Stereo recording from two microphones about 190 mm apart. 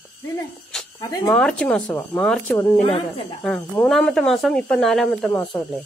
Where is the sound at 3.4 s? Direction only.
5° left (ahead or behind).